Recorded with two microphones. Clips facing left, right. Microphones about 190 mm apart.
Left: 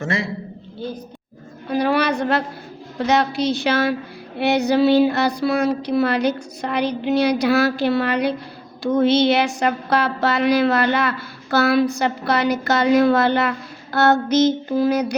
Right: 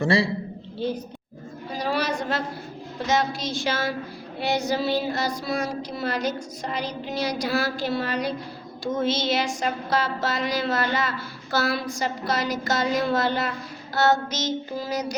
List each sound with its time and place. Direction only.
0.0 s a man's voice: 30° right (ahead or behind)
1.7 s a woman's voice: 60° left (ahead or behind)
3.1 s a sound: 65° left (ahead or behind)